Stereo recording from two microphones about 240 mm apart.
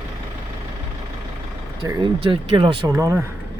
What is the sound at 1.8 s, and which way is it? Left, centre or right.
Speech, centre.